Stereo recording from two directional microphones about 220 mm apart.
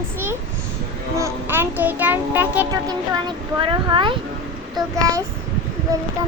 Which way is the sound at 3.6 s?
20° right (ahead or behind).